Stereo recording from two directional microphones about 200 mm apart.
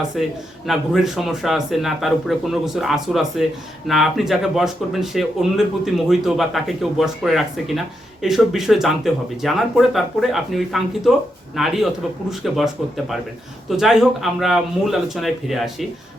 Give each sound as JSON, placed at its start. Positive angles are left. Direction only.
{"t": 0.2, "sound": "speech", "side_deg": 0}